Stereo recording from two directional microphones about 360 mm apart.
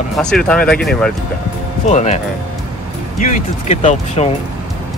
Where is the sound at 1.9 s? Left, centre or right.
Centre.